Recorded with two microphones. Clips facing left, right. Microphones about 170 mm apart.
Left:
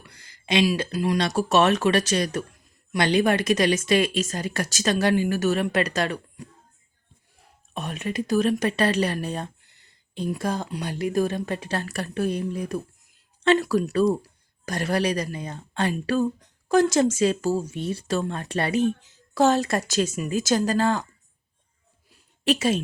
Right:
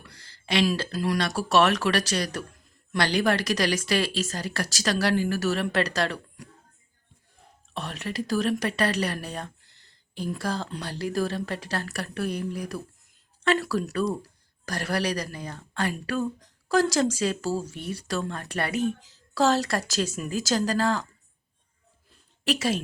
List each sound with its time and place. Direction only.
0.1 s speech: 15° left (ahead or behind)
7.7 s speech: 20° left (ahead or behind)
22.4 s speech: 25° left (ahead or behind)